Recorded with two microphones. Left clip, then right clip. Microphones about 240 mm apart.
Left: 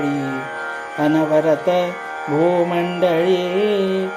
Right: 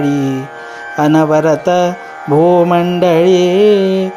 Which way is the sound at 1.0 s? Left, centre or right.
Right.